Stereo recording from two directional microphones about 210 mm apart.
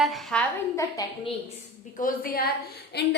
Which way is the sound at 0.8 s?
15° left (ahead or behind).